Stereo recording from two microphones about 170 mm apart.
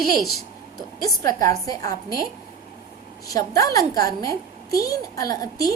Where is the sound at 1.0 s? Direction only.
20° left (ahead or behind).